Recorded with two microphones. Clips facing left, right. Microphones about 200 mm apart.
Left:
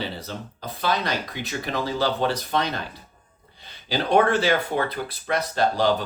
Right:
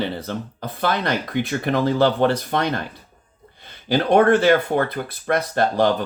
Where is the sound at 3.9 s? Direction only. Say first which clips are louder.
Right 5 dB; 55° right (ahead or behind).